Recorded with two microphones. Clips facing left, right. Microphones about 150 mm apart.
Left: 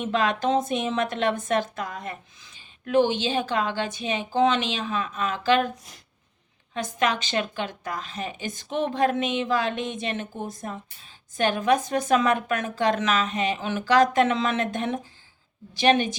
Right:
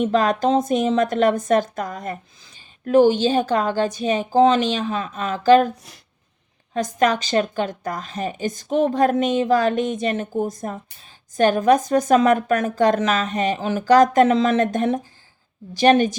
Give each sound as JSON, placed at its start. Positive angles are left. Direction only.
{"t": 0.0, "sound": "a woman's voice", "side_deg": -40}
{"t": 6.7, "sound": "a woman's voice", "side_deg": -40}